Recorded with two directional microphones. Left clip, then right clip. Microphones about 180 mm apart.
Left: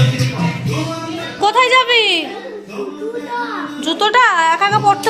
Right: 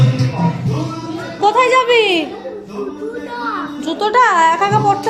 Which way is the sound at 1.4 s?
Centre (ahead or behind).